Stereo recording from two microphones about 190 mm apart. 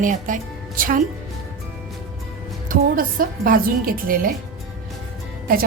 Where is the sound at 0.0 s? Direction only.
45° right (ahead or behind).